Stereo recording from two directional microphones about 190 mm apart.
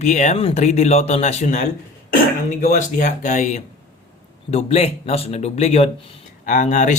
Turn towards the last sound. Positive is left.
turn(degrees=40)  # may be behind; listen again after turning